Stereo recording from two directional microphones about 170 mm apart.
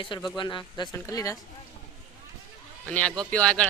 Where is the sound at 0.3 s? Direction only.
25° left (ahead or behind).